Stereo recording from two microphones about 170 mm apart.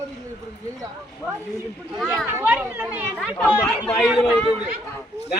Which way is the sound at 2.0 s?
10° right (ahead or behind).